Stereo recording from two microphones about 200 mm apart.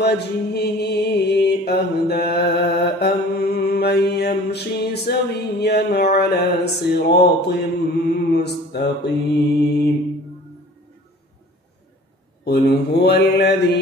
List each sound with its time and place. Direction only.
0.0 s mantra: 55° left (ahead or behind)
12.4 s mantra: 55° left (ahead or behind)